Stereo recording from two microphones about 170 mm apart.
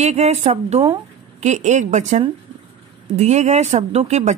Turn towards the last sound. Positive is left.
turn(degrees=-40)  # may be behind; listen again after turning